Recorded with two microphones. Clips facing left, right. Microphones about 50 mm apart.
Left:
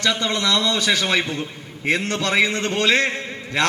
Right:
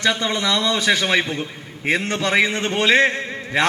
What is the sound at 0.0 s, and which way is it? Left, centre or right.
A man's voice, right.